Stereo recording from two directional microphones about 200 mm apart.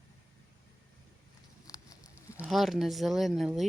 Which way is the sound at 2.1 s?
10° right (ahead or behind).